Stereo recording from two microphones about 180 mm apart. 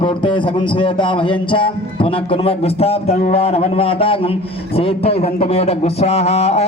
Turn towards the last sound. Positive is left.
turn(degrees=35)  # may be behind; listen again after turning